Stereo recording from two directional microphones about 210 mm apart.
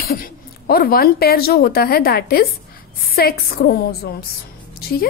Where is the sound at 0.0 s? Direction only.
45° left (ahead or behind).